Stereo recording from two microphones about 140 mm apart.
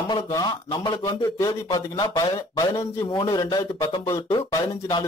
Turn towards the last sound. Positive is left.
turn(degrees=30)  # may be behind; listen again after turning